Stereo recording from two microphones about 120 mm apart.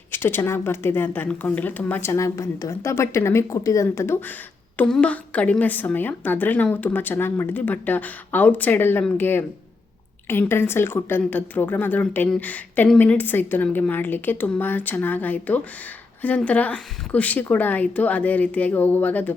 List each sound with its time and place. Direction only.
0.1 s speech: 20° left (ahead or behind)
4.8 s a woman's voice: 10° left (ahead or behind)